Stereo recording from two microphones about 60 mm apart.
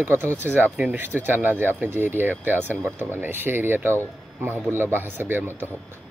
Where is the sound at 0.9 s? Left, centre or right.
Right.